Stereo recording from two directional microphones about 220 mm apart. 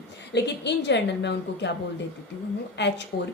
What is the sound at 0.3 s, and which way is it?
Speech, 50° left (ahead or behind).